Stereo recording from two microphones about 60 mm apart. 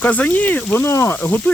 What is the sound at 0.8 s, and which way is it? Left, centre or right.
Speech, left.